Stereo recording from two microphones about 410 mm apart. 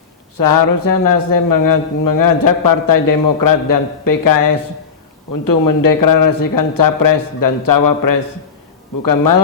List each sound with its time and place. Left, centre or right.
0.3 s a man's voice: left